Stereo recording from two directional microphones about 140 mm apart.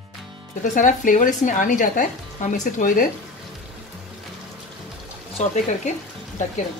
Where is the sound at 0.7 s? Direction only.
65° left (ahead or behind).